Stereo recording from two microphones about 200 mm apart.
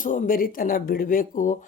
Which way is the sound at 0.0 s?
45° left (ahead or behind).